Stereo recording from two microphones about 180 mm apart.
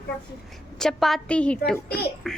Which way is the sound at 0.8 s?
Centre (ahead or behind).